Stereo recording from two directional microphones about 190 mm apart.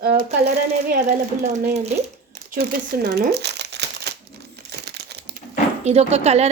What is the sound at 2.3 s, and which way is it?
Crumpling, 50° right (ahead or behind).